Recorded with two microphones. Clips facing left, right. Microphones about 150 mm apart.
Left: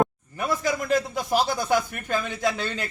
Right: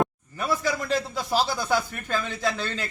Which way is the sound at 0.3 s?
15° left (ahead or behind).